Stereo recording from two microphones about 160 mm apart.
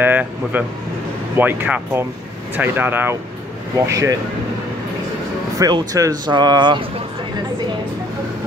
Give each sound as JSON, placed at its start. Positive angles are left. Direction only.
{"t": 0.0, "sound": "speech", "side_deg": -10}
{"t": 5.6, "sound": "speech", "side_deg": -25}